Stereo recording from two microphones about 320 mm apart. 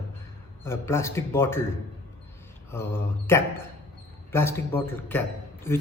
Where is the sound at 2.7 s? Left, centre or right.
Centre.